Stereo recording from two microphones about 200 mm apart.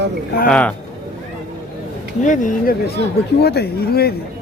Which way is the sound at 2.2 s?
40° left (ahead or behind).